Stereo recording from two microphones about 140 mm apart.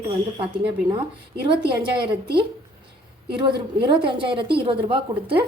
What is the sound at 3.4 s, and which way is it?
A woman's voice, 35° right (ahead or behind).